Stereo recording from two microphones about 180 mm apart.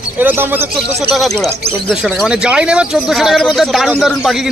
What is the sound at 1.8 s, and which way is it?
Speech, centre (ahead or behind).